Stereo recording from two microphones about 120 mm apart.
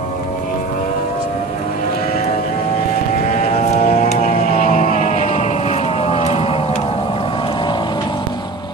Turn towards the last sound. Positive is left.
turn(degrees=55)  # may be behind; listen again after turning